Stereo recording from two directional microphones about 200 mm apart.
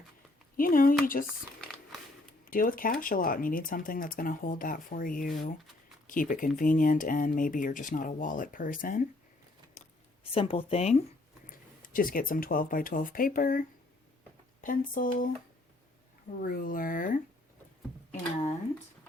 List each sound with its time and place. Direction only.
0.5 s speech: 45° left (ahead or behind)
2.4 s speech: 45° left (ahead or behind)
9.8 s a sound: 35° left (ahead or behind)
10.3 s speech: 25° left (ahead or behind)
11.4 s speech: 45° left (ahead or behind)
16.4 s speech: 45° left (ahead or behind)